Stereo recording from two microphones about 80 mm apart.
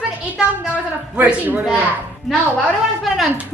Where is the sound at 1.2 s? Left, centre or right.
Centre.